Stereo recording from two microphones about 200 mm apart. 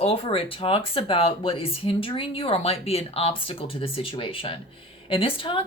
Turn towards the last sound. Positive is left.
turn(degrees=25)  # may be behind; listen again after turning